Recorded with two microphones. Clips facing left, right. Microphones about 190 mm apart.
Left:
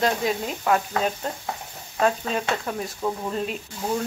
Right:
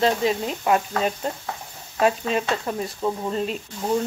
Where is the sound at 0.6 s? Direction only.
10° right (ahead or behind).